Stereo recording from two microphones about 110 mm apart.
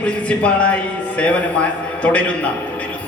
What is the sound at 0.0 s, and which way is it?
Speech, 10° left (ahead or behind).